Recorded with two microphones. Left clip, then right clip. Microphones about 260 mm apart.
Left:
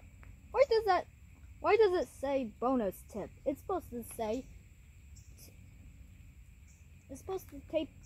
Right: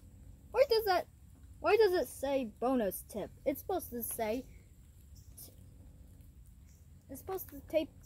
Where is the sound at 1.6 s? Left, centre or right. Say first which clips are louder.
Even; centre.